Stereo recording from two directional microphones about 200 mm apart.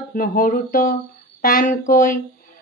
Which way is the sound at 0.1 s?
45° left (ahead or behind).